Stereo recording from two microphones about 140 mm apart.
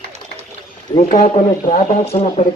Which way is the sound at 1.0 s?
65° left (ahead or behind).